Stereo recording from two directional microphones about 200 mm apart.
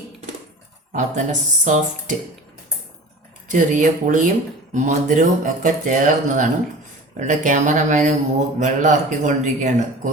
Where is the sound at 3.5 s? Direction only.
40° right (ahead or behind).